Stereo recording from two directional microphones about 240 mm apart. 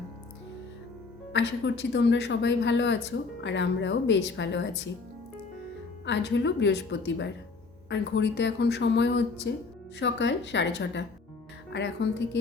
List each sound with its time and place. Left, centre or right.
1.3 s speech: left
6.1 s speech: left